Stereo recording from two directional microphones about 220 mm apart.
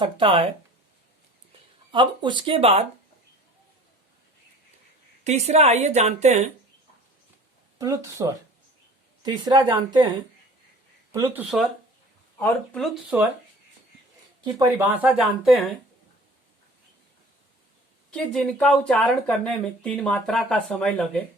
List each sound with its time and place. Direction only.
0.0 s speech: 25° right (ahead or behind)
1.9 s speech: 20° right (ahead or behind)
5.2 s a woman's voice: 30° right (ahead or behind)
7.8 s speech: 15° right (ahead or behind)
11.1 s speech: 15° right (ahead or behind)
11.4 s speech: centre (ahead or behind)
14.8 s speech: 5° right (ahead or behind)
18.1 s speech: centre (ahead or behind)